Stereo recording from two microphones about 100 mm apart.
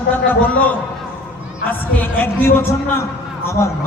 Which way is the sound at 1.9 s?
20° left (ahead or behind).